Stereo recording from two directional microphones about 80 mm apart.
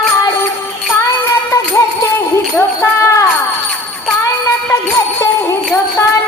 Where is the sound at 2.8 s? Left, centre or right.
Left.